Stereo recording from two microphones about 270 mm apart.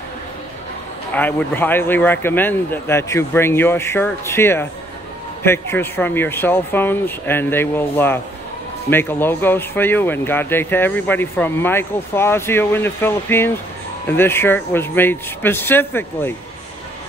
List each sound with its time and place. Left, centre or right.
1.1 s speech: centre